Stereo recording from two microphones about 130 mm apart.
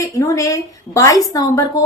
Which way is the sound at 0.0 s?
25° left (ahead or behind).